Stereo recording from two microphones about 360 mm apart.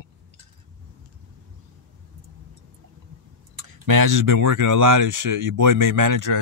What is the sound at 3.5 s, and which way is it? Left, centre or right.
Speech, right.